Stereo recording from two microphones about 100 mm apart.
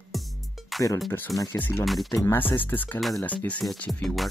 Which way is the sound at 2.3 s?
20° left (ahead or behind).